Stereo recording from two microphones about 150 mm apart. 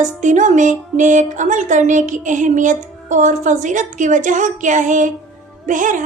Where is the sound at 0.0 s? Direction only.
55° right (ahead or behind).